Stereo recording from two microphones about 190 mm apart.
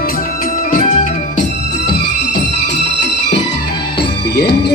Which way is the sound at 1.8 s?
60° left (ahead or behind).